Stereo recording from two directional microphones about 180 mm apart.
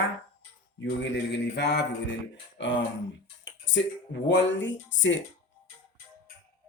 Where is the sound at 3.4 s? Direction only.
90° left.